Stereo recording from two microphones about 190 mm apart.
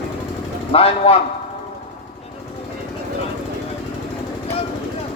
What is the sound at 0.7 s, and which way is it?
Speech, 30° left (ahead or behind).